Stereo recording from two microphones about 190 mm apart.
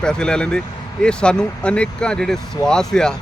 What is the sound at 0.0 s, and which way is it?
Speech, 5° left (ahead or behind).